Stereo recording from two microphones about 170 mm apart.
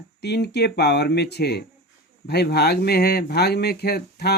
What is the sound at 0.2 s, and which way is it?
Speech, 75° left (ahead or behind).